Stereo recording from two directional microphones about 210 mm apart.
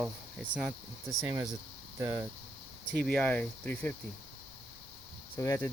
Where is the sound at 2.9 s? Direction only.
5° left (ahead or behind).